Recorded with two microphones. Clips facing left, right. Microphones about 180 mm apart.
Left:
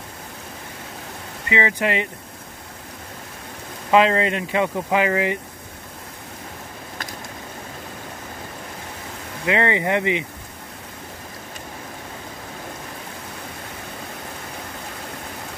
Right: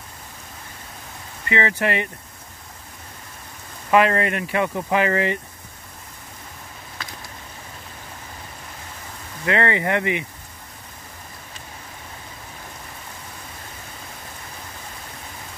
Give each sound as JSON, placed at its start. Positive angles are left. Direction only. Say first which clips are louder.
{"t": 1.5, "sound": "speech", "louder": "even", "side_deg": 15}
{"t": 3.9, "sound": "speech", "louder": "left 1 dB", "side_deg": 20}
{"t": 9.5, "sound": "speech", "louder": "left 1 dB", "side_deg": 15}